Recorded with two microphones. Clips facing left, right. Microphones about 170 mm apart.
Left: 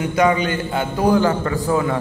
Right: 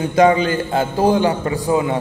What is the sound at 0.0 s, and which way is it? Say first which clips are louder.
A man's voice: right 3 dB; 30° right (ahead or behind).